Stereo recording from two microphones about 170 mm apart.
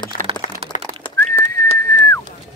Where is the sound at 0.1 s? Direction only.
55° left (ahead or behind).